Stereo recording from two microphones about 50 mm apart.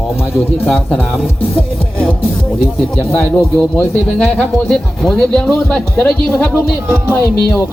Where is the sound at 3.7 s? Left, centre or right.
Centre.